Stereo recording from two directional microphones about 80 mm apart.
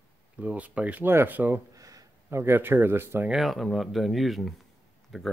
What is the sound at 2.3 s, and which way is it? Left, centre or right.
Speech, right.